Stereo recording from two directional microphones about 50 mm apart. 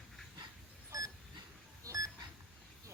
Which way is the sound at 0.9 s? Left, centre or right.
Right.